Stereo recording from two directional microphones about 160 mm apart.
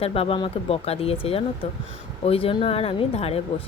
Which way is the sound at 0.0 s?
40° left (ahead or behind).